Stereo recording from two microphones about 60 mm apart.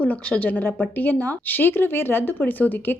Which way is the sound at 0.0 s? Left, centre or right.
Left.